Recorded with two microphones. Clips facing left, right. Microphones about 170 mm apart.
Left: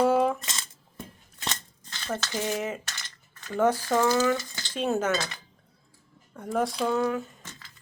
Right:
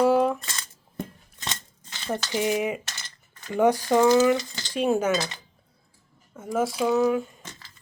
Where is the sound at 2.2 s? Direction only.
10° right (ahead or behind).